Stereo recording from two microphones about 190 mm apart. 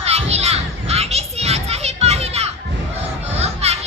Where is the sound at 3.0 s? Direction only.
35° right (ahead or behind).